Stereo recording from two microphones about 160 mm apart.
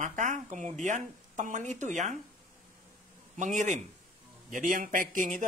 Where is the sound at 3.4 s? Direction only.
50° right (ahead or behind).